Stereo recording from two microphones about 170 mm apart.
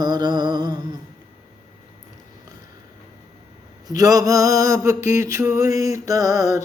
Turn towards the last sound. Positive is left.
turn(degrees=-20)  # may be behind; listen again after turning